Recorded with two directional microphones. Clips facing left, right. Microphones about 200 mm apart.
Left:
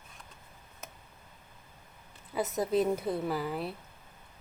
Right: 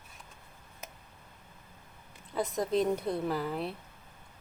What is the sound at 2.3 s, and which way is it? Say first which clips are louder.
A woman's voice: left 1 dB; 5° left (ahead or behind).